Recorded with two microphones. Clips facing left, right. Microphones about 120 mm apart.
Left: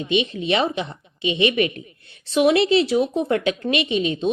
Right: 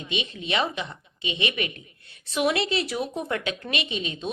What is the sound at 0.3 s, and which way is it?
Speech, 30° left (ahead or behind).